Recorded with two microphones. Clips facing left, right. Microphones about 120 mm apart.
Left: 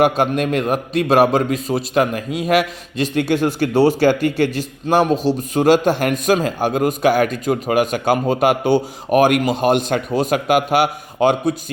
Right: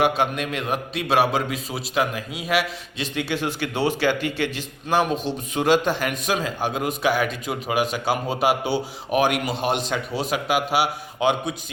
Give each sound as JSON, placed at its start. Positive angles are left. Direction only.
{"t": 0.0, "sound": "a man's voice", "side_deg": 45}